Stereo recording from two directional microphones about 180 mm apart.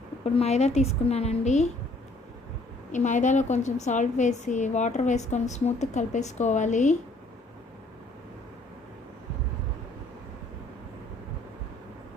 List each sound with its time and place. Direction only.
0.3 s a woman's voice: 35° left (ahead or behind)
2.9 s a woman's voice: 45° left (ahead or behind)